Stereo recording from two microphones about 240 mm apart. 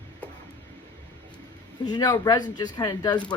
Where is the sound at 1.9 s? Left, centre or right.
Centre.